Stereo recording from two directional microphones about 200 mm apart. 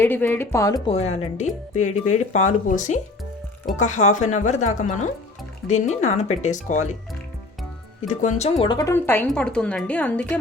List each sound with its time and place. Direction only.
0.0 s a woman's voice: 10° left (ahead or behind)
0.9 s speech: 30° left (ahead or behind)
8.0 s speech: 35° left (ahead or behind)
8.6 s a woman's voice: 20° left (ahead or behind)